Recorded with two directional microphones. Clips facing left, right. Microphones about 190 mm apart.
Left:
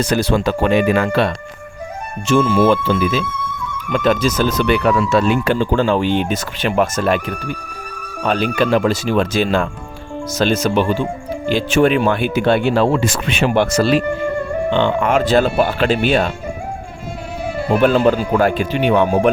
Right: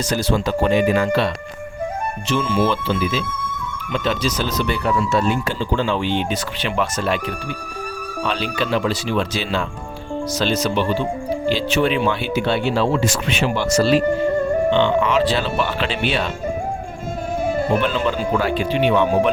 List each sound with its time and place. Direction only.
0.0 s speech: 60° left (ahead or behind)
2.2 s speech: 45° left (ahead or behind)
4.6 s speech: 75° left (ahead or behind)
5.5 s speech: 50° left (ahead or behind)
17.7 s speech: 45° left (ahead or behind)